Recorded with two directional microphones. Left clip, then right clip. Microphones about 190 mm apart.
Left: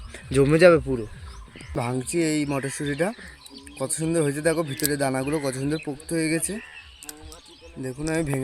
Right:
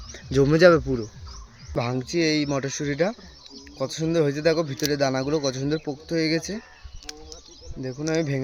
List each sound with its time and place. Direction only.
0.1 s speech: 10° right (ahead or behind)
7.8 s speech: 20° right (ahead or behind)